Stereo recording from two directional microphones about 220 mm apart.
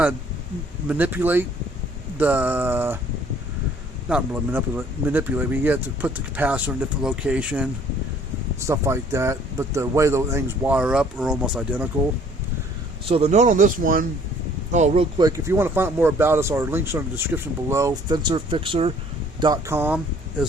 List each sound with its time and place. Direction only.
0.9 s speech: 10° right (ahead or behind)
4.1 s speech: 5° right (ahead or behind)
13.1 s speech: 30° right (ahead or behind)
15.2 s speech: 15° right (ahead or behind)